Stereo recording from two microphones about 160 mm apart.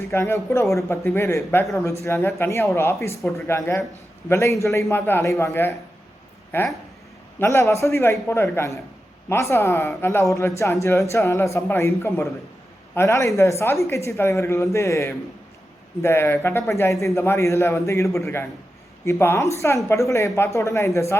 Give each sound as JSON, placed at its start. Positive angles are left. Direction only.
{"t": 0.1, "sound": "a woman's voice", "side_deg": 15}